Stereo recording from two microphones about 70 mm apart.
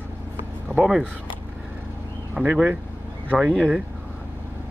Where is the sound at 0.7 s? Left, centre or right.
Centre.